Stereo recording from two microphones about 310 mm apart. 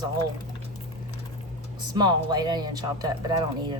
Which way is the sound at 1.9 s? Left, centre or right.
Centre.